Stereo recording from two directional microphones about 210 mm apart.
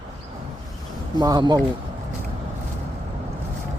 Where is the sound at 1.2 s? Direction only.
20° right (ahead or behind).